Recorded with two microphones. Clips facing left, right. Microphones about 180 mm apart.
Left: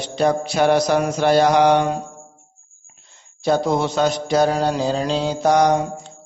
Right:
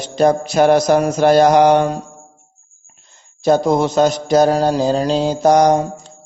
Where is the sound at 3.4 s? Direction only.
45° right (ahead or behind).